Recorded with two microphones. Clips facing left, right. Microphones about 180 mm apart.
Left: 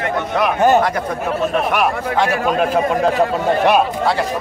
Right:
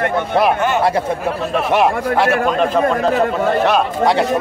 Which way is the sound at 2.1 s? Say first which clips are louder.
Right 2 dB; 5° right (ahead or behind).